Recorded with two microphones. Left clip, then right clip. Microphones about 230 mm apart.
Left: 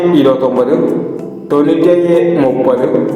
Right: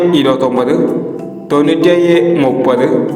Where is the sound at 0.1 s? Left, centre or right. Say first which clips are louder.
Left 1 dB; right.